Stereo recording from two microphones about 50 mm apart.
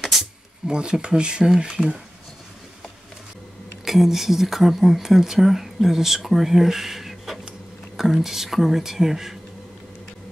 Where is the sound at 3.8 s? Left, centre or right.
Centre.